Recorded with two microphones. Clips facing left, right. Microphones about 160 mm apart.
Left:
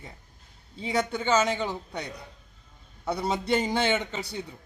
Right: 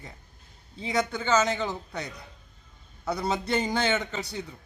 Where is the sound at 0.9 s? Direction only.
25° left (ahead or behind).